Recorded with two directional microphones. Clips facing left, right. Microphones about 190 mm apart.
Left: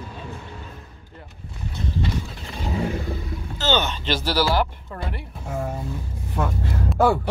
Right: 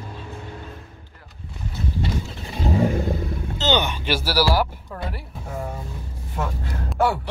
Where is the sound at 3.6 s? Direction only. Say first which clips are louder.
Right 1 dB; 15° right (ahead or behind).